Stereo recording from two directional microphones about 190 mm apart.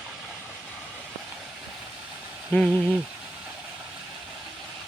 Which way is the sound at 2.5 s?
5° left (ahead or behind).